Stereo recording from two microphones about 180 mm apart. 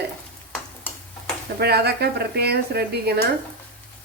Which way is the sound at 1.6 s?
65° right (ahead or behind).